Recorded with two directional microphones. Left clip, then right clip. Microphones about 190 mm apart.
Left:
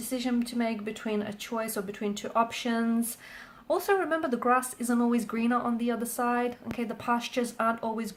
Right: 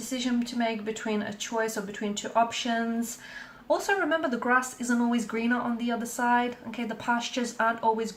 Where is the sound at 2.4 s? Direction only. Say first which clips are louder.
Right 2 dB; 45° left (ahead or behind).